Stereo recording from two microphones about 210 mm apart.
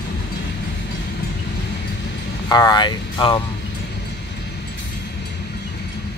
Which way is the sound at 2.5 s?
20° left (ahead or behind).